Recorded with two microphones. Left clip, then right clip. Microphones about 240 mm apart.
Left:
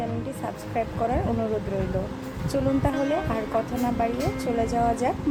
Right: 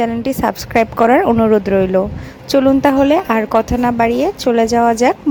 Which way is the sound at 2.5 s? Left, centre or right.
Right.